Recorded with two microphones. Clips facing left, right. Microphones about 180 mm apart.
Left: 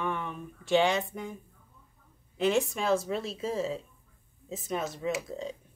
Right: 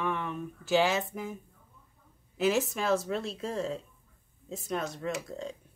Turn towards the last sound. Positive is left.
turn(degrees=0)  # may be behind; listen again after turning